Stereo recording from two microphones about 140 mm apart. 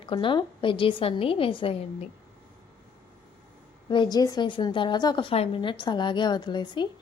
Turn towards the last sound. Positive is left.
turn(degrees=35)  # may be behind; listen again after turning